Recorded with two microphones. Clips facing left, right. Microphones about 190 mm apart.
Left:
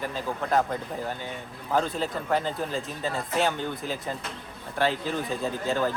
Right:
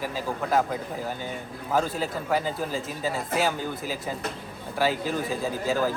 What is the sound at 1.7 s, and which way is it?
Speech, 5° right (ahead or behind).